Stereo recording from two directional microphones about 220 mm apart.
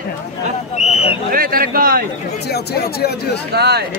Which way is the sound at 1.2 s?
40° right (ahead or behind).